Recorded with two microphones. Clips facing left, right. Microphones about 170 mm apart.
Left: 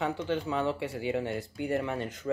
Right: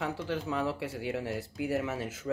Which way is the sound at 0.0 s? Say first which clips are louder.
Left 3 dB; centre (ahead or behind).